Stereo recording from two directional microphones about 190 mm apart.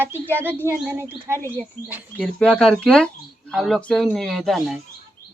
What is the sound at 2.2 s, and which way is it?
Speech, 5° left (ahead or behind).